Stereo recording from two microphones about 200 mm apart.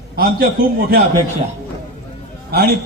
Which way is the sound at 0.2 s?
50° right (ahead or behind).